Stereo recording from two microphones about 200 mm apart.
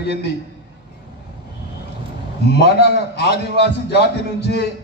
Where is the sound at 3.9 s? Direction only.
55° left (ahead or behind).